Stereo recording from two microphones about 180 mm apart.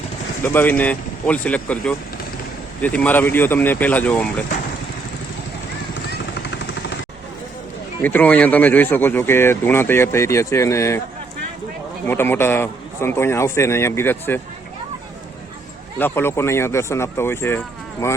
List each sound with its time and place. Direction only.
0.4 s speech: 10° left (ahead or behind)
6.1 s vehicle: 70° left (ahead or behind)
8.0 s speech: 10° left (ahead or behind)
12.0 s speech: 10° left (ahead or behind)
16.0 s speech: 10° left (ahead or behind)